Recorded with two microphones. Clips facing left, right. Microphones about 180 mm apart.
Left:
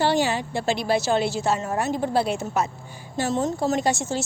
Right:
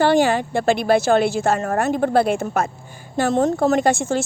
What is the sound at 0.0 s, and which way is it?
A woman's voice, 50° right (ahead or behind).